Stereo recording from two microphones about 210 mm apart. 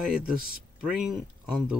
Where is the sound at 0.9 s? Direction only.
Centre (ahead or behind).